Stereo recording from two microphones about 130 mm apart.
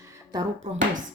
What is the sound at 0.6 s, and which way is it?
Speech, 90° right.